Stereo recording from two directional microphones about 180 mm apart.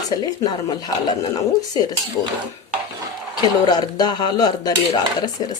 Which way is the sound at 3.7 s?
20° left (ahead or behind).